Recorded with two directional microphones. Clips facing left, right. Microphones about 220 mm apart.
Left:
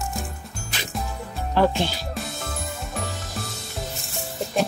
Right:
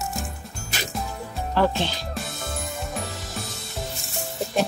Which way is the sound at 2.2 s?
Centre (ahead or behind).